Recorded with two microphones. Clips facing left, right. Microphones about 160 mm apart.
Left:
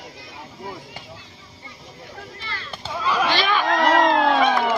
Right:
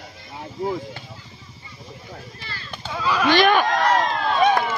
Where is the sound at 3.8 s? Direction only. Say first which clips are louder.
Left 3 dB; 90° left.